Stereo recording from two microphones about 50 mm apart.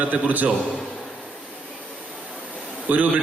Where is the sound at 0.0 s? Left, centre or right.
Right.